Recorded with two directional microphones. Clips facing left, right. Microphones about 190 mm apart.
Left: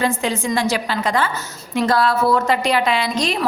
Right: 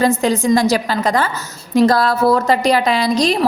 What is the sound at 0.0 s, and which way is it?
Speech, 40° right (ahead or behind).